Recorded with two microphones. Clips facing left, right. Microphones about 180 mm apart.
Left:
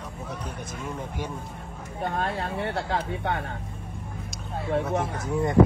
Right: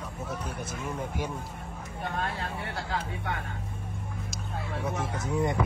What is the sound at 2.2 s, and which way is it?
Speech, 25° left (ahead or behind).